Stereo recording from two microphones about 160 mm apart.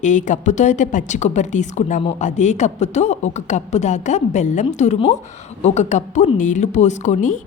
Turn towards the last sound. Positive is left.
turn(degrees=50)  # may be behind; listen again after turning